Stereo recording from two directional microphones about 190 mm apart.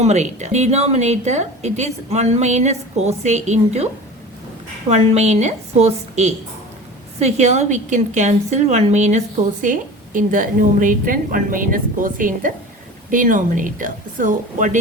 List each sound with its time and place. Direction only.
0.0 s a woman's voice: 35° right (ahead or behind)
4.9 s a woman's voice: 35° right (ahead or behind)